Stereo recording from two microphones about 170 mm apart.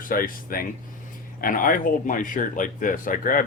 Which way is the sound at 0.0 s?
55° left (ahead or behind).